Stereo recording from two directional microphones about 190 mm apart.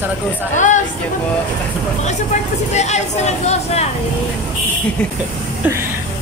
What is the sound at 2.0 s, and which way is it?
Speech, 35° left (ahead or behind).